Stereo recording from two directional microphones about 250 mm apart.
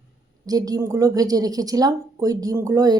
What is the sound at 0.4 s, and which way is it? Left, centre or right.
Speech, centre.